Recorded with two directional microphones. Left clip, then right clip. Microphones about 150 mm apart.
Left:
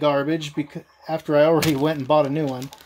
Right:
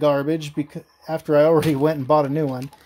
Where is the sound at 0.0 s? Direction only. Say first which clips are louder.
Right 1 dB; 50° right (ahead or behind); by 2.6 s 35° right (ahead or behind).